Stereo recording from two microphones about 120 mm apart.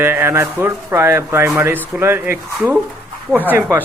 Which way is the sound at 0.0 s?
20° right (ahead or behind).